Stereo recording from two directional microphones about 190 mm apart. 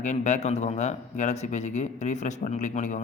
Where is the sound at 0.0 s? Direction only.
40° left (ahead or behind).